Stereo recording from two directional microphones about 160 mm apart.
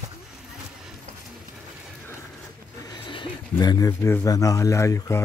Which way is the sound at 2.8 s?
30° left (ahead or behind).